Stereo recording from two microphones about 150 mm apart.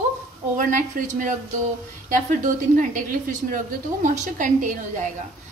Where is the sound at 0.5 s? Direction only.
60° right (ahead or behind).